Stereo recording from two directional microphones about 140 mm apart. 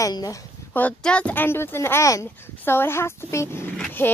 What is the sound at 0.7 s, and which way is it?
A child's voice, 10° left (ahead or behind).